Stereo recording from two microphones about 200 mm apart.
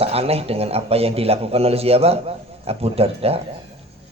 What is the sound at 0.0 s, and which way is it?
A man's voice, 30° right (ahead or behind).